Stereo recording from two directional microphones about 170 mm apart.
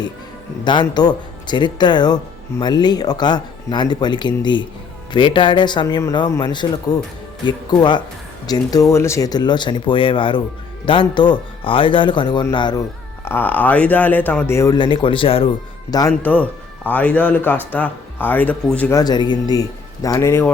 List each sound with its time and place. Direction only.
0.6 s speech: 25° left (ahead or behind)
13.2 s speech: 10° left (ahead or behind)
14.8 s speech: 25° left (ahead or behind)
16.2 s speech: 10° left (ahead or behind)
18.9 s speech: 25° left (ahead or behind)